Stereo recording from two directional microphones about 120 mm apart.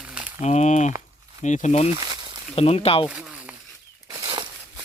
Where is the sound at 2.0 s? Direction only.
40° right (ahead or behind).